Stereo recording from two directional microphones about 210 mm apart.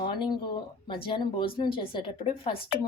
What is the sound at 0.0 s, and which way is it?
Speech, 20° left (ahead or behind).